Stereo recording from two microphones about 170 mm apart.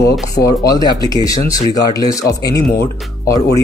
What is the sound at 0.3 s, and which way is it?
Speech, 20° left (ahead or behind).